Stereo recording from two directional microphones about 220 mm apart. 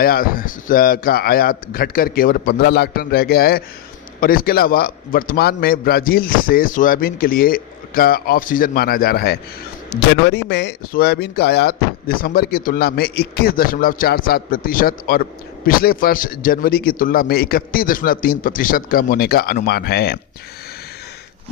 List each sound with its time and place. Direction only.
0.0 s speech: 40° left (ahead or behind)